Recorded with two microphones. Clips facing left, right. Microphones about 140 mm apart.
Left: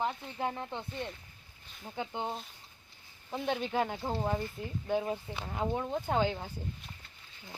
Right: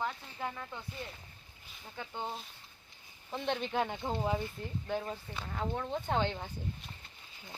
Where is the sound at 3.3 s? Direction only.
5° left (ahead or behind).